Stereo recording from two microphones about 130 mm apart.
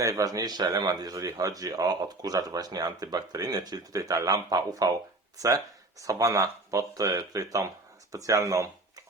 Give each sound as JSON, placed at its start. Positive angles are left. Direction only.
{"t": 0.0, "sound": "speech", "side_deg": -25}
{"t": 6.0, "sound": "speech", "side_deg": -25}